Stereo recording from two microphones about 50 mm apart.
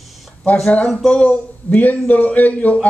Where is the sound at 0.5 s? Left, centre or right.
Left.